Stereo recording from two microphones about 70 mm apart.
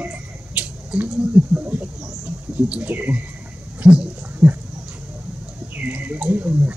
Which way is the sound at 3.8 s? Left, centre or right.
Centre.